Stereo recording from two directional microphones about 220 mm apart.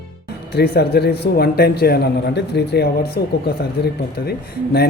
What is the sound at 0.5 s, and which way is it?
Speech, 45° left (ahead or behind).